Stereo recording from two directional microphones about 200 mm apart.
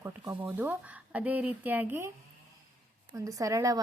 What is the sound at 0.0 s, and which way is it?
Speech, 10° right (ahead or behind).